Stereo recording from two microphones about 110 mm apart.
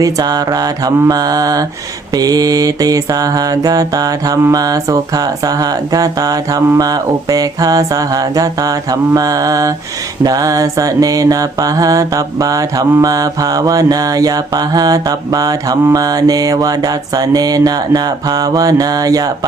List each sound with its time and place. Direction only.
0.0 s music: 35° right (ahead or behind)